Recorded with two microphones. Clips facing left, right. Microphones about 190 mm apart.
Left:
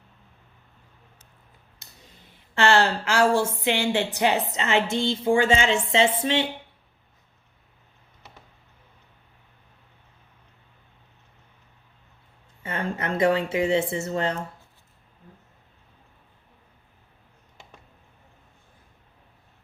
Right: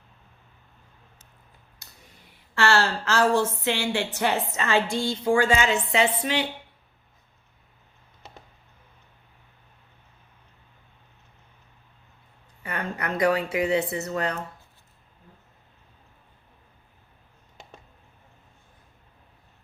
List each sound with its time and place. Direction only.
1.8 s clicking: 25° left (ahead or behind)
2.6 s a woman's voice: 20° left (ahead or behind)
12.6 s speech: 25° left (ahead or behind)